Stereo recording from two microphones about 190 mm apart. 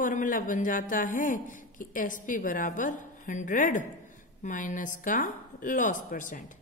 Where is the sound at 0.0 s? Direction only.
45° left (ahead or behind).